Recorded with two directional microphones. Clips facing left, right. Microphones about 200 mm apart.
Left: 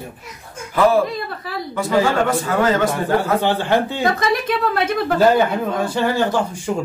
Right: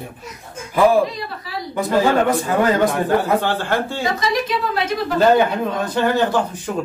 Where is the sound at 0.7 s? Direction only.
15° right (ahead or behind).